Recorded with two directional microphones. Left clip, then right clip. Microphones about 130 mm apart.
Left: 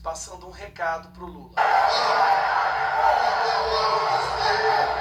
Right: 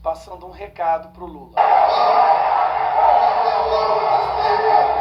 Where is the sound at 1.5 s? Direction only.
45° right (ahead or behind).